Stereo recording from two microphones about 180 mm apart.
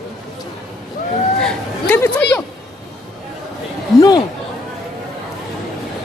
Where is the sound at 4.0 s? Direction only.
20° left (ahead or behind).